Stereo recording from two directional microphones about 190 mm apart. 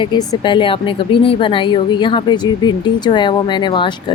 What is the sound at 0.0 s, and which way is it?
A woman's voice, 20° left (ahead or behind).